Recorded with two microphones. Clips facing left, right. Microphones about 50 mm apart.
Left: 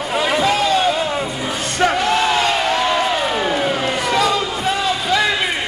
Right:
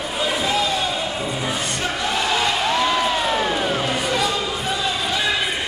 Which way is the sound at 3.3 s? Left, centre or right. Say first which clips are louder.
Left 2 dB; centre.